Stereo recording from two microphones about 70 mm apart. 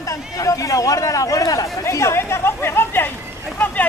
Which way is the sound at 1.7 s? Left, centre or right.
Left.